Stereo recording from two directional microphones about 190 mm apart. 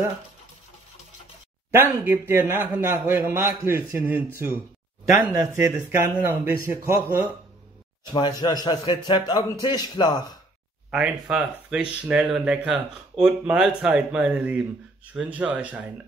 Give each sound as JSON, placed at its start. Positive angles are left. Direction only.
{"t": 2.0, "sound": "a man's voice", "side_deg": -10}
{"t": 8.1, "sound": "a man's voice", "side_deg": 20}
{"t": 10.9, "sound": "a man's voice", "side_deg": -5}